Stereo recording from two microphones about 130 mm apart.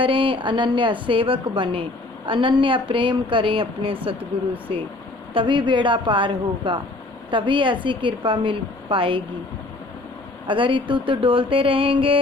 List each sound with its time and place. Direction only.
0.0 s a woman's voice: 40° right (ahead or behind)
5.3 s a woman's voice: 40° right (ahead or behind)
10.4 s a woman's voice: 40° right (ahead or behind)